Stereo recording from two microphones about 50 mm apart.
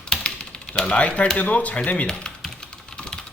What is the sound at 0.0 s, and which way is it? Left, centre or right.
Typewriter, centre.